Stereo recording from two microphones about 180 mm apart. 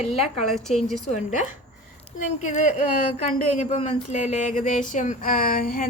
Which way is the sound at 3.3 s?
40° left (ahead or behind).